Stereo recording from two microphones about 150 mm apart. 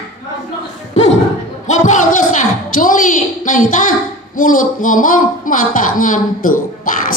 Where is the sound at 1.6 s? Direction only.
55° left (ahead or behind).